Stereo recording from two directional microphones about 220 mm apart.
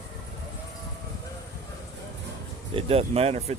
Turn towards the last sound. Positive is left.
turn(degrees=-30)  # may be behind; listen again after turning